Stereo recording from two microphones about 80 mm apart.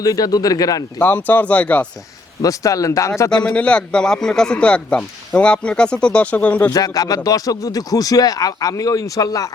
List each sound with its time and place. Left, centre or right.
0.0 s speech: left
0.9 s speech: left
2.4 s speech: left
3.5 s speech: centre
6.7 s speech: left